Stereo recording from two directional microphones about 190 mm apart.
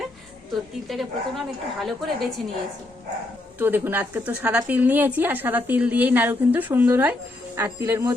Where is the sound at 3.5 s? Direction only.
10° right (ahead or behind).